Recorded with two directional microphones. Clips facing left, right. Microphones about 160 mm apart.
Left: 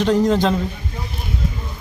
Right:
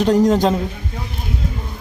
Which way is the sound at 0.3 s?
40° right (ahead or behind).